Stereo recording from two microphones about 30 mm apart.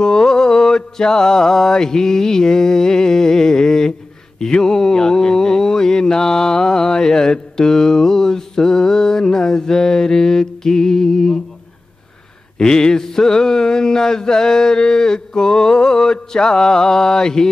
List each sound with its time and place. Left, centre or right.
0.0 s mantra: left
12.5 s mantra: left